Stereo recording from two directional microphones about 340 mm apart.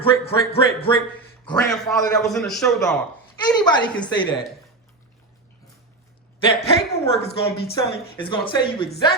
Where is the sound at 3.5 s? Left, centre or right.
Centre.